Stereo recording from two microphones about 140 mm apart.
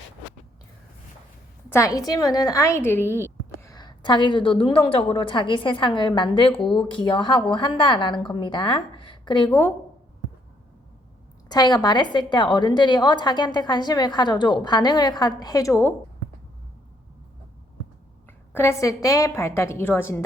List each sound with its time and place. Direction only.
1.7 s a woman's voice: 25° left (ahead or behind)
11.5 s a woman's voice: 30° left (ahead or behind)
18.5 s a woman's voice: 20° left (ahead or behind)